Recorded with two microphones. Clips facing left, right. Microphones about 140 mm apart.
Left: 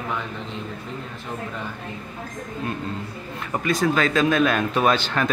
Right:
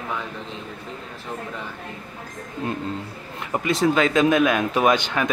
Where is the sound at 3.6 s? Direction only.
20° right (ahead or behind).